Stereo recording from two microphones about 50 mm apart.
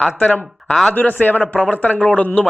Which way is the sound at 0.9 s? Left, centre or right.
Left.